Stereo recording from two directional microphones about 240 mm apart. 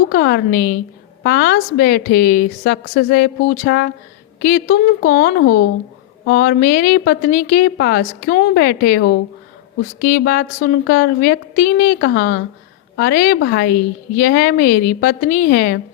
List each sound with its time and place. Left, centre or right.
0.1 s a woman's voice: left